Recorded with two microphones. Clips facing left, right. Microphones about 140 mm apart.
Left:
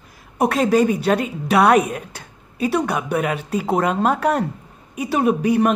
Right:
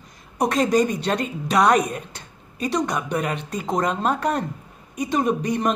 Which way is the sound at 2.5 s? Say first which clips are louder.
Left 3 dB; 10° left (ahead or behind).